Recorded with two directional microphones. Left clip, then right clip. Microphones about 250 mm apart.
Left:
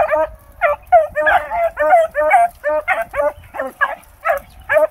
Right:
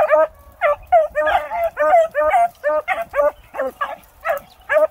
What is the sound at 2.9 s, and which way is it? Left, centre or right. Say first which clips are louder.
Dog: left 1 dB; centre.